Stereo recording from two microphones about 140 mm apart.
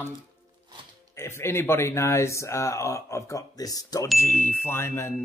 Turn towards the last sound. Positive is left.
turn(degrees=15)  # may be behind; listen again after turning